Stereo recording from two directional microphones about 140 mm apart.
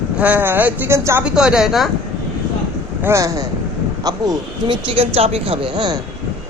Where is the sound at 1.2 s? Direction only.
5° right (ahead or behind).